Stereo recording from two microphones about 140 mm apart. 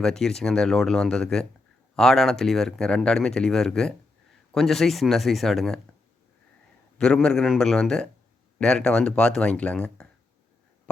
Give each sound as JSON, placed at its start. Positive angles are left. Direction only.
{"t": 0.0, "sound": "speech", "side_deg": 5}
{"t": 7.0, "sound": "speech", "side_deg": 5}